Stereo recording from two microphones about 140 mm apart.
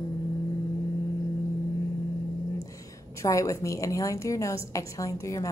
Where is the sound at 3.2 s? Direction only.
25° left (ahead or behind).